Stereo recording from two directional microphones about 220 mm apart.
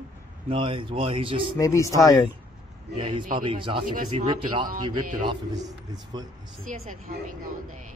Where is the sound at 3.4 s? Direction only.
20° right (ahead or behind).